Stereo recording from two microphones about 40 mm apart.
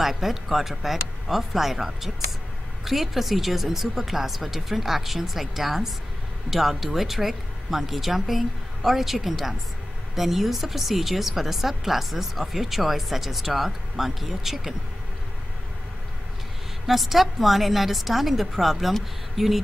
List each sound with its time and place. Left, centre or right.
0.0 s a woman's voice: centre
16.8 s a woman's voice: centre